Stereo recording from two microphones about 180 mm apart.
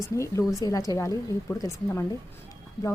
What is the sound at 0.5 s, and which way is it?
A woman's voice, 20° left (ahead or behind).